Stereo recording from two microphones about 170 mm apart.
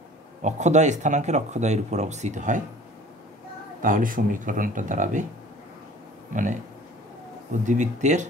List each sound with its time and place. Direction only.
0.4 s speech: 45° right (ahead or behind)
3.8 s speech: 55° right (ahead or behind)
6.3 s speech: 50° right (ahead or behind)
7.6 s speech: 45° right (ahead or behind)